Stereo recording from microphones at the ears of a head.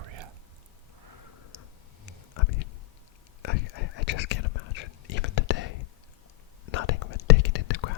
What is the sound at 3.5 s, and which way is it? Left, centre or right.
Whispering, left.